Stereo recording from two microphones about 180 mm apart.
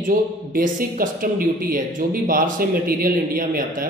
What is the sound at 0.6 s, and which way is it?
Speech, 50° right (ahead or behind).